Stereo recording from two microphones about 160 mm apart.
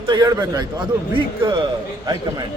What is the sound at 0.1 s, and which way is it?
A man's voice, 25° right (ahead or behind).